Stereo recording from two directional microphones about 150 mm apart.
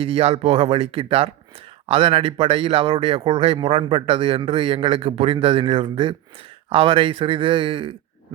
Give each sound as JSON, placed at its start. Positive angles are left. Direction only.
{"t": 0.0, "sound": "a man's voice", "side_deg": -40}